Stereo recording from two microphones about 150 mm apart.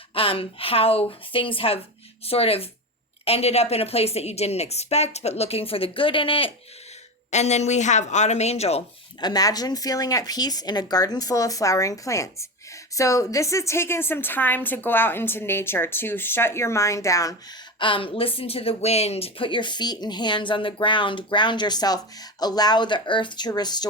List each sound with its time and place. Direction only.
0.1 s a woman's voice: 40° left (ahead or behind)
7.3 s a woman's voice: 50° left (ahead or behind)
9.2 s a woman's voice: 25° left (ahead or behind)
17.7 s speech: 35° left (ahead or behind)